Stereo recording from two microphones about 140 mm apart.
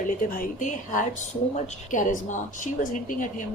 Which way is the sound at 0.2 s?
75° left (ahead or behind).